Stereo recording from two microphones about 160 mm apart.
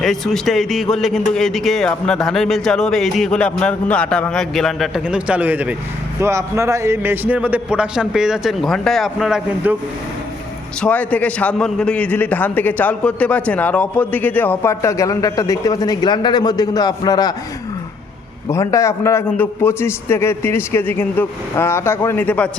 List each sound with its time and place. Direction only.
0.0 s a man's voice: centre (ahead or behind)
10.8 s a man's voice: 10° left (ahead or behind); by 17.3 s 25° left (ahead or behind)
18.4 s a man's voice: 20° left (ahead or behind)